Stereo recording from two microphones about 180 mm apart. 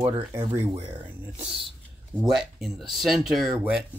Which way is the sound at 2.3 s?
Centre (ahead or behind).